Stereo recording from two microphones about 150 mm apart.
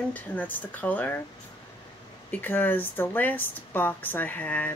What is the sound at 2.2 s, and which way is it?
Speech, 10° left (ahead or behind).